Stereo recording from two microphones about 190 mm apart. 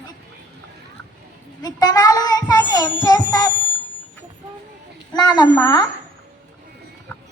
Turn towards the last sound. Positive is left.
turn(degrees=20)  # may be behind; listen again after turning